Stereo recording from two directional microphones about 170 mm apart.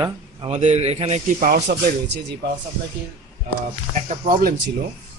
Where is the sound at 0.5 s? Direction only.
40° right (ahead or behind).